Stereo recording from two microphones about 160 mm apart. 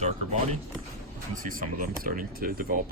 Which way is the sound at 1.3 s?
60° right (ahead or behind).